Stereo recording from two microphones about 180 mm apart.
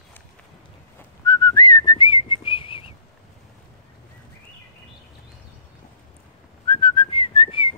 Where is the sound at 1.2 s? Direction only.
25° left (ahead or behind).